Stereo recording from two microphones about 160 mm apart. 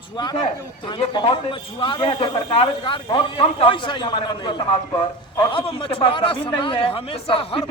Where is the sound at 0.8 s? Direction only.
30° left (ahead or behind).